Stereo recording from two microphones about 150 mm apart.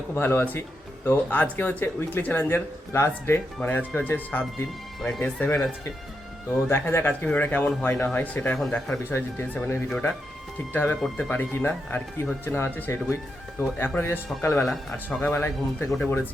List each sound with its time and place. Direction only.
0.1 s speech: 15° left (ahead or behind)
6.7 s speech: 15° left (ahead or behind)
14.6 s speech: centre (ahead or behind)